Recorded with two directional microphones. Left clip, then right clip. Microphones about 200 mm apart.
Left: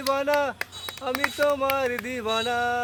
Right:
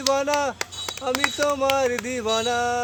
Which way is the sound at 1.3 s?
Centre (ahead or behind).